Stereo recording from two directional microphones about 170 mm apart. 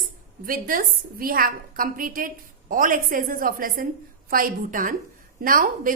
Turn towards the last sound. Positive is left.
turn(degrees=-55)  # may be behind; listen again after turning